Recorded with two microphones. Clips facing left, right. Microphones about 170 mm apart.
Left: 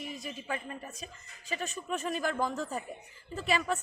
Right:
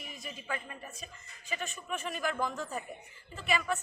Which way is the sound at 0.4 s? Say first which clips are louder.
Left 1 dB; 35° left (ahead or behind).